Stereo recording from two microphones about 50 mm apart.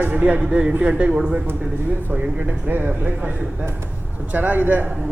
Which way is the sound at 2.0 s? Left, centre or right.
Right.